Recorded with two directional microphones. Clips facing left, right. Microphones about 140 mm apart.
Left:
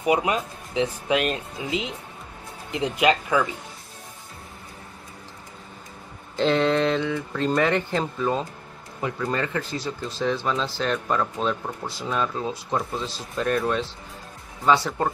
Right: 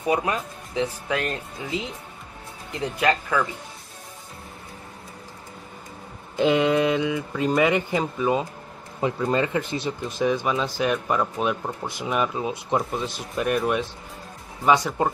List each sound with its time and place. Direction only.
0.0 s speech: 20° left (ahead or behind)
6.3 s speech: 10° right (ahead or behind)